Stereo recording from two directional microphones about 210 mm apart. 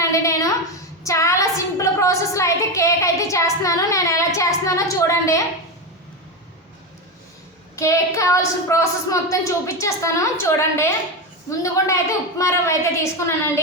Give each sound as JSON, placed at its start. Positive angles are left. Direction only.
{"t": 0.0, "sound": "a woman's voice", "side_deg": 15}
{"t": 7.8, "sound": "a woman's voice", "side_deg": 15}